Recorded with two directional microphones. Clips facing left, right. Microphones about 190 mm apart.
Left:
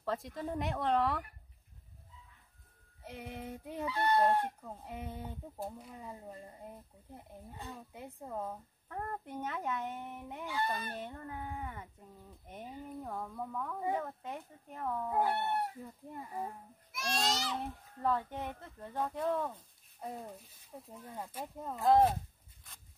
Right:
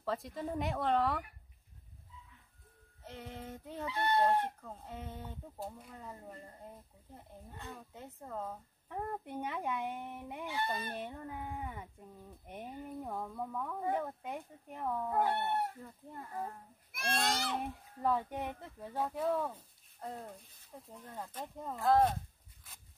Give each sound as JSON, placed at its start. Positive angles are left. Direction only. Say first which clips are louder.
{"t": 0.0, "sound": "speech", "louder": "even", "side_deg": 0}
{"t": 3.0, "sound": "speech", "louder": "left 2 dB", "side_deg": 10}
{"t": 3.8, "sound": "speech", "louder": "left 2 dB", "side_deg": -25}
{"t": 4.6, "sound": "speech", "louder": "left 2 dB", "side_deg": 10}
{"t": 8.8, "sound": "speech", "louder": "right 1 dB", "side_deg": -10}
{"t": 10.4, "sound": "speech", "louder": "left 1 dB", "side_deg": -25}
{"t": 11.0, "sound": "speech", "louder": "right 1 dB", "side_deg": -10}
{"t": 13.0, "sound": "speech", "louder": "right 1 dB", "side_deg": -10}
{"t": 15.0, "sound": "speech", "louder": "even", "side_deg": 10}
{"t": 15.3, "sound": "speech", "louder": "even", "side_deg": -15}
{"t": 15.8, "sound": "speech", "louder": "left 2 dB", "side_deg": 10}
{"t": 16.9, "sound": "speech", "louder": "even", "side_deg": -55}
{"t": 18.0, "sound": "speech", "louder": "even", "side_deg": -10}
{"t": 20.0, "sound": "speech", "louder": "left 1 dB", "side_deg": 10}